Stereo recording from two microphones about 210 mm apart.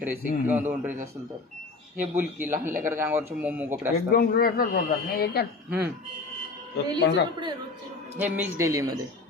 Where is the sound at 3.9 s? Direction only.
45° left (ahead or behind).